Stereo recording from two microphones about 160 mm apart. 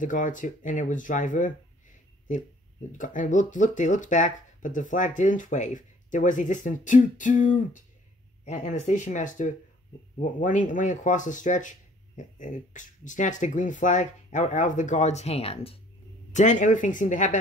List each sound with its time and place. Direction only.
0.0 s speech: 55° left (ahead or behind)
3.0 s speech: 55° left (ahead or behind); by 15.8 s 35° left (ahead or behind)
16.3 s speech: 50° left (ahead or behind)